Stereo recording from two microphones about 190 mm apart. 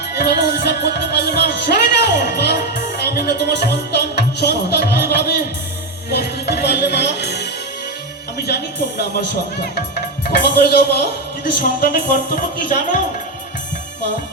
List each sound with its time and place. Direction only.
0.2 s music: 55° left (ahead or behind)
8.4 s music: 55° left (ahead or behind)
9.7 s speech: 55° left (ahead or behind)